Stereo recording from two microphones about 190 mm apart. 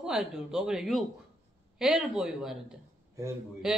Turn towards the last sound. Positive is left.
turn(degrees=-5)  # may be behind; listen again after turning